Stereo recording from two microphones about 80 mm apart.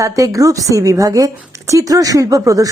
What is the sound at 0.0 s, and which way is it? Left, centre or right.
Speech, right.